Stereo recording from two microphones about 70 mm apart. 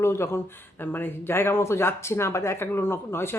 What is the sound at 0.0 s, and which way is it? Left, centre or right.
Speech, left.